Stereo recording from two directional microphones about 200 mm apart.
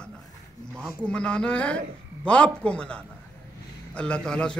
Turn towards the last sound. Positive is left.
turn(degrees=5)  # may be behind; listen again after turning